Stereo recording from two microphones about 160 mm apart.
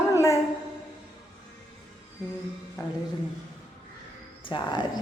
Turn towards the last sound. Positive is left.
turn(degrees=30)  # may be behind; listen again after turning